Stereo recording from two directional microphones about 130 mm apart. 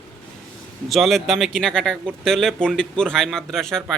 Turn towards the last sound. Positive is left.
turn(degrees=5)  # may be behind; listen again after turning